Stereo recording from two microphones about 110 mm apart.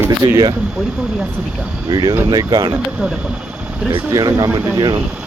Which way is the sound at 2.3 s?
40° right (ahead or behind).